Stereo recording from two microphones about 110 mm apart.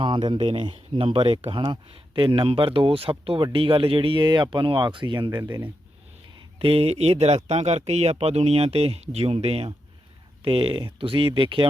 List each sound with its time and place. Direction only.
0.0 s speech: 45° right (ahead or behind)
5.4 s speech: 35° right (ahead or behind)
6.6 s speech: 60° right (ahead or behind)